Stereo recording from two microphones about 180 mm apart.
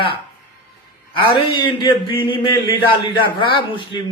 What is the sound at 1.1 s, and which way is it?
A man's voice, 25° left (ahead or behind).